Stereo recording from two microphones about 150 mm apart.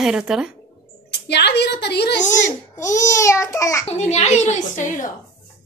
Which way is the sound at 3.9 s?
50° left (ahead or behind).